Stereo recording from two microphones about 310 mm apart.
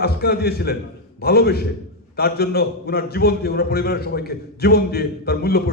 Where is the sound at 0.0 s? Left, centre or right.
Left.